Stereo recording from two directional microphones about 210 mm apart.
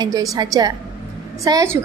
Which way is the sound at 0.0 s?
15° right (ahead or behind).